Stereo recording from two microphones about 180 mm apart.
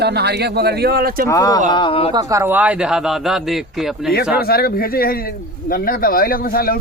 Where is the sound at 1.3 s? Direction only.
20° left (ahead or behind).